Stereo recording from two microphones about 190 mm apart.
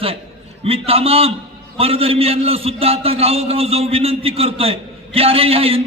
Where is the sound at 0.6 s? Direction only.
30° right (ahead or behind).